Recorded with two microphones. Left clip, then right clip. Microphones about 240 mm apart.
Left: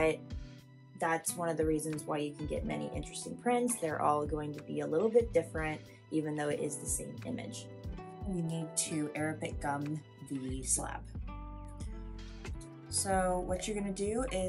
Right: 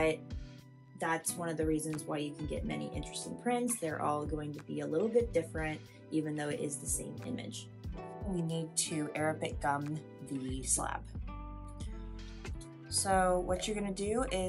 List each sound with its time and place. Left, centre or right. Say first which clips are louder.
0.9 s speech: left 2 dB; centre
3.1 s speech: right 1 dB; left
3.4 s speech: left 3 dB; centre
6.7 s speech: left 1 dB; left
7.2 s speech: left 1 dB; centre
12.9 s speech: right 2 dB; centre